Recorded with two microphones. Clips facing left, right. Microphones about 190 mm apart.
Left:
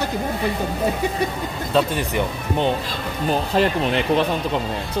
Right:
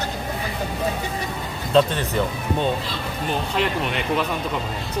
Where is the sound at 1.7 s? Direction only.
5° left (ahead or behind).